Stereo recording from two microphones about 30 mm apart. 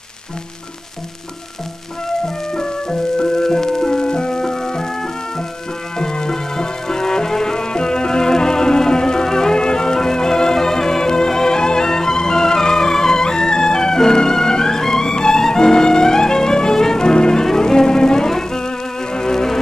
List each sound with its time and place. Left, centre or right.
2.2 s music: left
5.9 s music: left
19.1 s insect: centre